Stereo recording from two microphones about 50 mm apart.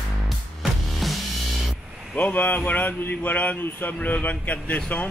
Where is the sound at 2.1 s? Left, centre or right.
Left.